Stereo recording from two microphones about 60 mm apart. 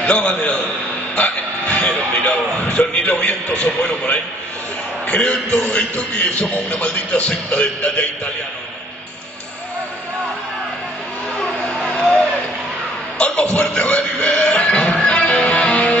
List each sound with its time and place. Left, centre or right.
0.0 s a man's voice: centre
1.1 s music: left
2.2 s a man's voice: centre
11.3 s a sound: left
13.2 s music: centre